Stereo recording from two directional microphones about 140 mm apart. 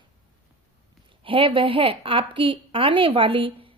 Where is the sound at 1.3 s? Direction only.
40° right (ahead or behind).